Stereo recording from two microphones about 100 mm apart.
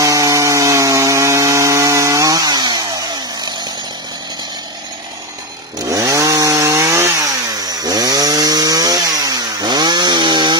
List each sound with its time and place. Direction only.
0.0 s chainsaw: 35° right (ahead or behind)
5.9 s chainsaw: 35° right (ahead or behind); by 10.5 s 50° right (ahead or behind)